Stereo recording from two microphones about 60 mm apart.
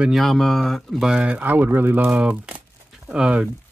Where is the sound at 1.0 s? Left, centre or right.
Centre.